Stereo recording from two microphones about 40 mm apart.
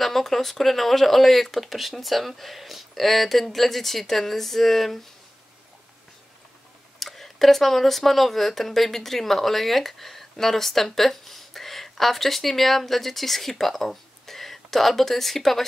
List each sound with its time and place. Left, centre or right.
0.0 s speech: centre
7.0 s speech: centre